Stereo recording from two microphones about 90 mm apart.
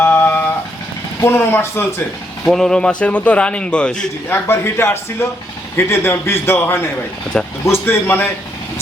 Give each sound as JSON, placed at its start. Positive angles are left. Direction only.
{"t": 0.0, "sound": "vehicle", "side_deg": 20}
{"t": 1.2, "sound": "a man's voice", "side_deg": 25}
{"t": 2.5, "sound": "speech", "side_deg": 5}
{"t": 4.3, "sound": "a man's voice", "side_deg": 25}